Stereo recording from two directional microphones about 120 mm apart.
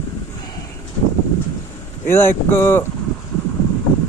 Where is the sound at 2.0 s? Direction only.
20° left (ahead or behind).